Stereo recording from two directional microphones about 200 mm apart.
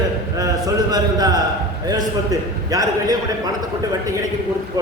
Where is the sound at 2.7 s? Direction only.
15° right (ahead or behind).